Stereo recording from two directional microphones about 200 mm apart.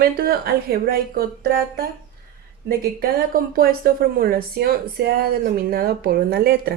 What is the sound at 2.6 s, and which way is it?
A woman's voice, 45° right (ahead or behind).